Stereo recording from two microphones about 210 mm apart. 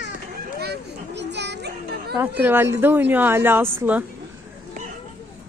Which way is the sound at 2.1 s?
10° right (ahead or behind).